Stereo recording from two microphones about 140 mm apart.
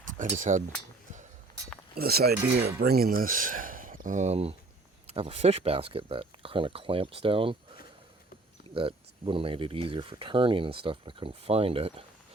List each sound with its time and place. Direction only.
0.2 s speech: 65° right (ahead or behind)
2.0 s speech: 90° right; by 7.5 s 40° right (ahead or behind)
8.7 s speech: 40° right (ahead or behind)